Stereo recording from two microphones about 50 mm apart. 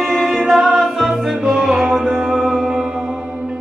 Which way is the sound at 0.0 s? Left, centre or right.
Centre.